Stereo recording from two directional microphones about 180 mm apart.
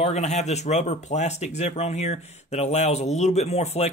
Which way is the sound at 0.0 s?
40° left (ahead or behind).